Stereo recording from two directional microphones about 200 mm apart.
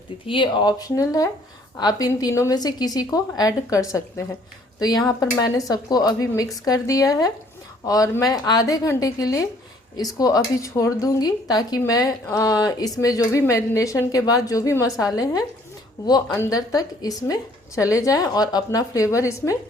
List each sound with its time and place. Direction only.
0.3 s a woman's voice: 25° left (ahead or behind)